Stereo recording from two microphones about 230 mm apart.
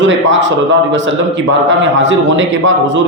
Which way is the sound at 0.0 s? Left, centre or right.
Right.